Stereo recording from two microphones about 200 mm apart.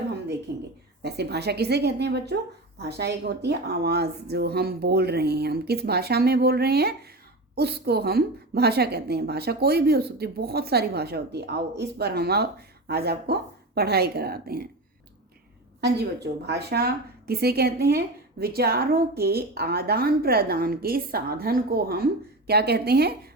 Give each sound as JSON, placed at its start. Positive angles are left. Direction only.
{"t": 0.5, "sound": "a woman's voice", "side_deg": -55}
{"t": 15.8, "sound": "a woman's voice", "side_deg": -55}